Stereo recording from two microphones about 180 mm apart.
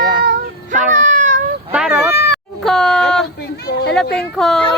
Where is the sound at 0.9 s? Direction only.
45° right (ahead or behind).